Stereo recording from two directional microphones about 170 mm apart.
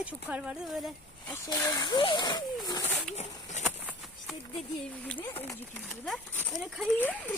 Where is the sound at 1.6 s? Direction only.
25° left (ahead or behind).